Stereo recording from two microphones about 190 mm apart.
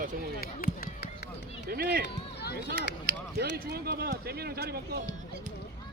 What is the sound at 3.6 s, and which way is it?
Speech, 55° right (ahead or behind).